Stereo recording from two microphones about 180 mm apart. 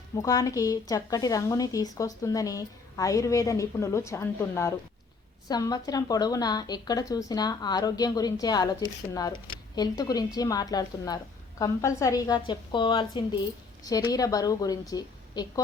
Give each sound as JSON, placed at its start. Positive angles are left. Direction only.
{"t": 0.2, "sound": "speech", "side_deg": 20}